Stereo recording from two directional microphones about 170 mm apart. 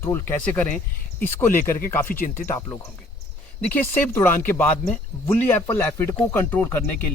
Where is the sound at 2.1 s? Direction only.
55° left (ahead or behind).